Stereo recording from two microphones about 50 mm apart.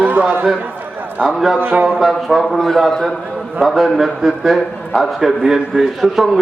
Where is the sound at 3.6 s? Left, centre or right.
Centre.